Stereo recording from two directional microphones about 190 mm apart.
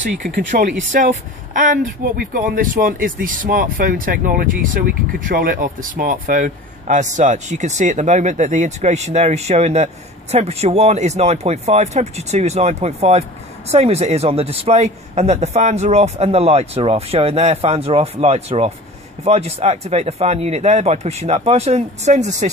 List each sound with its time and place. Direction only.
0.0 s speech: 40° right (ahead or behind)